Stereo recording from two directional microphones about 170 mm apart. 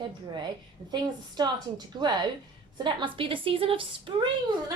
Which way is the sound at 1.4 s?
25° right (ahead or behind).